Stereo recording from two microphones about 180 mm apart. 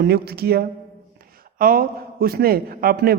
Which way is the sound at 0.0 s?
65° right (ahead or behind).